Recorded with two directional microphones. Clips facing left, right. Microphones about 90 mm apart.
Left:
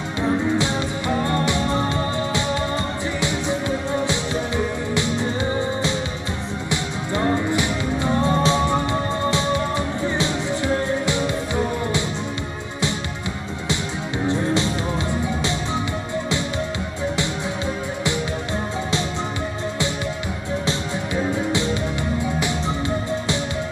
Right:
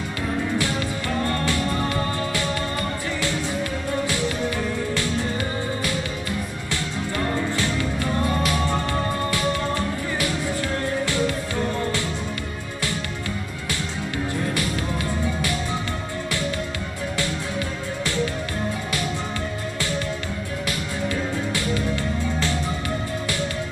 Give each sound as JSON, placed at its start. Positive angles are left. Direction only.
{"t": 0.2, "sound": "music", "side_deg": 20}
{"t": 13.7, "sound": "music", "side_deg": 20}
{"t": 20.6, "sound": "music", "side_deg": 20}